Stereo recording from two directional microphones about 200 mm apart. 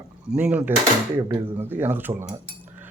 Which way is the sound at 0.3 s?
5° right (ahead or behind).